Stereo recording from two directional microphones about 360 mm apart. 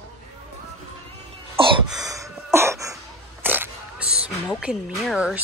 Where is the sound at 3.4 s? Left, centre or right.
Centre.